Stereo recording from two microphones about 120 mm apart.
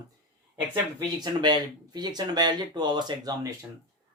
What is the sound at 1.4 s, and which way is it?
Speech, 35° right (ahead or behind).